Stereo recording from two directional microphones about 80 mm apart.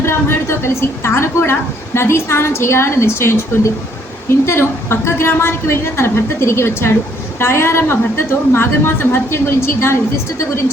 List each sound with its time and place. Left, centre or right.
0.0 s a woman's voice: left